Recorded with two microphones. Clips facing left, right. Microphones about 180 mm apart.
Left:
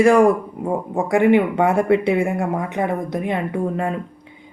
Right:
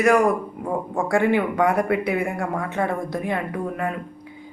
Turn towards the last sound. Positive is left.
turn(degrees=30)  # may be behind; listen again after turning